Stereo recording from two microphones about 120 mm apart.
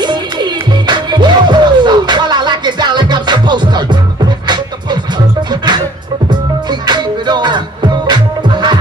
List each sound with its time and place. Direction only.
0.0 s music: 40° right (ahead or behind)
6.7 s music: 35° right (ahead or behind)